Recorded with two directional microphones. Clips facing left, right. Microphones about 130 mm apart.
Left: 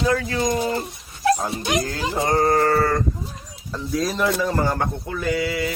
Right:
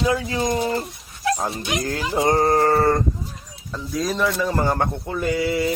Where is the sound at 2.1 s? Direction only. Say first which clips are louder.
Right 1 dB; 25° right (ahead or behind).